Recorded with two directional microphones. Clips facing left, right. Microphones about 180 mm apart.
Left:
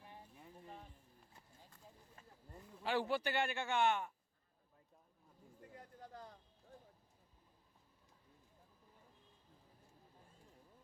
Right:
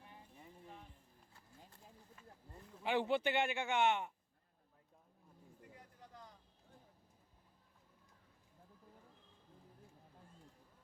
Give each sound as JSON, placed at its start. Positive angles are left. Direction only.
{"t": 2.8, "sound": "a man's voice", "side_deg": -20}